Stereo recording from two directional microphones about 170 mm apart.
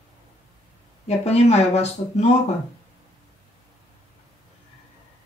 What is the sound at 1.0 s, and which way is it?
Speech, 40° left (ahead or behind).